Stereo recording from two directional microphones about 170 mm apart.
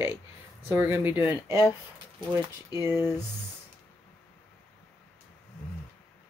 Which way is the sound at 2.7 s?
15° right (ahead or behind).